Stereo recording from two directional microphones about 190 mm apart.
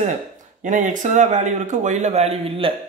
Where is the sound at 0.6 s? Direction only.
40° right (ahead or behind).